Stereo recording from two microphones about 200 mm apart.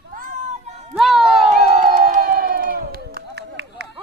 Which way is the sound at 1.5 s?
40° right (ahead or behind).